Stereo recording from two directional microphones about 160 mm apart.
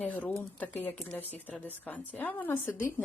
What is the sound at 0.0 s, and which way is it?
Speech, 10° left (ahead or behind).